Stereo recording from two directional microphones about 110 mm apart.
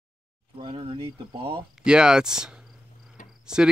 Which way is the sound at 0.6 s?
50° right (ahead or behind).